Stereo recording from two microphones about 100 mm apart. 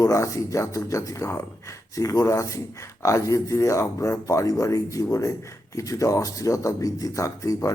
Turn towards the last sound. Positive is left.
turn(degrees=30)  # may be behind; listen again after turning